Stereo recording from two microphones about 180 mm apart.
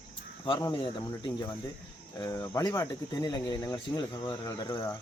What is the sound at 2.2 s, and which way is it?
Speech, 15° left (ahead or behind).